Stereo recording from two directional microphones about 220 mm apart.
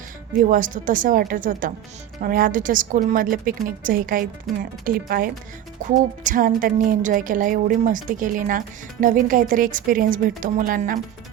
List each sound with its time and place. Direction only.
0.5 s a woman's voice: 40° right (ahead or behind)